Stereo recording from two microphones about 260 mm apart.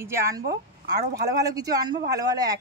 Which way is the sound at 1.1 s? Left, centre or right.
Right.